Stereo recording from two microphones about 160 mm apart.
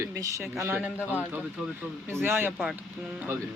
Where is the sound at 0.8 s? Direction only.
10° right (ahead or behind).